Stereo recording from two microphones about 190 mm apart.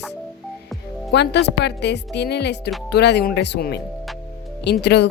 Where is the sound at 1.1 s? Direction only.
65° left (ahead or behind).